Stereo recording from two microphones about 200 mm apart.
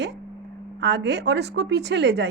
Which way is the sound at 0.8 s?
60° right (ahead or behind).